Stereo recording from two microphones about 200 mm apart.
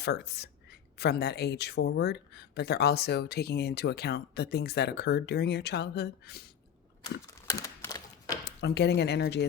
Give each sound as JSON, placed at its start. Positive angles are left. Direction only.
{"t": 0.0, "sound": "a woman's voice", "side_deg": 55}
{"t": 7.4, "sound": "typewriter", "side_deg": 15}
{"t": 8.4, "sound": "a woman's voice", "side_deg": 55}